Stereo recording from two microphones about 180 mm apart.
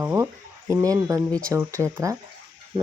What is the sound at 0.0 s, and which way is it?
Speech, 15° right (ahead or behind).